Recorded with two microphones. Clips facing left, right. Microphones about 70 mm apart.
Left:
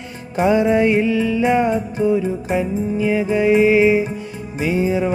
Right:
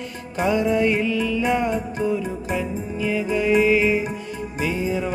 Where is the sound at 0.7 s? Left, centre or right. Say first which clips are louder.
Left 5 dB; left.